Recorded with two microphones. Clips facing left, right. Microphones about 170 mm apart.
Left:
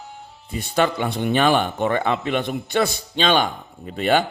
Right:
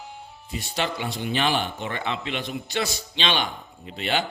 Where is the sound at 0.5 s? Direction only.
50° left (ahead or behind).